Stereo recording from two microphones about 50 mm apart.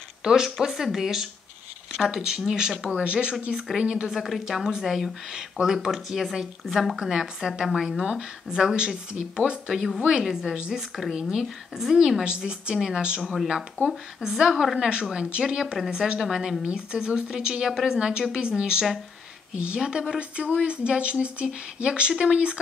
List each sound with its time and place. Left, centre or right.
0.2 s a woman's voice: centre
3.9 s speech: centre
4.6 s a woman's voice: centre
7.0 s a woman's voice: centre
9.8 s a woman's voice: centre
13.2 s a woman's voice: centre; by 22.6 s right